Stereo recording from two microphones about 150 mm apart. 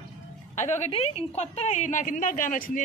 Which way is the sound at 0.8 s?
45° left (ahead or behind).